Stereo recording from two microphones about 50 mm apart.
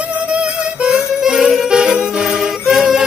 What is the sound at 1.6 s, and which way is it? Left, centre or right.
Music, centre.